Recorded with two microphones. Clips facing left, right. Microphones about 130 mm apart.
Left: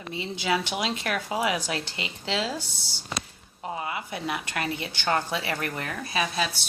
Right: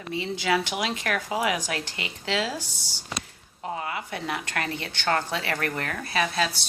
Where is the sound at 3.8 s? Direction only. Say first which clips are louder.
Left 1 dB; 20° left (ahead or behind).